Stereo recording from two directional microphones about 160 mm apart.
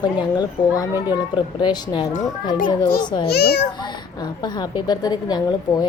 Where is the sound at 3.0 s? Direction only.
30° left (ahead or behind).